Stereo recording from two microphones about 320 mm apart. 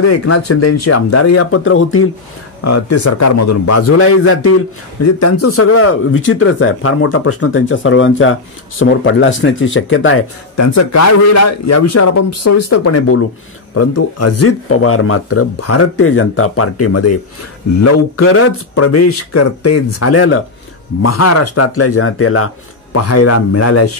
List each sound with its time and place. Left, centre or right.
0.1 s speech: left
2.6 s speech: left
10.5 s speech: left
21.0 s speech: left